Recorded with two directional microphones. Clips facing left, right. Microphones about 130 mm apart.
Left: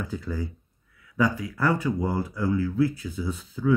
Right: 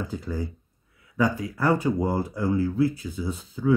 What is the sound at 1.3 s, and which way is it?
Speech, 25° right (ahead or behind).